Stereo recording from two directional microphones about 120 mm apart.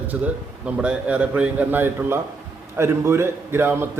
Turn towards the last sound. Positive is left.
turn(degrees=-20)  # may be behind; listen again after turning